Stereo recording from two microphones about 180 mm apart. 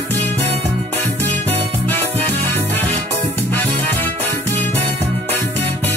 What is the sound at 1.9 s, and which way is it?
Music, 35° right (ahead or behind).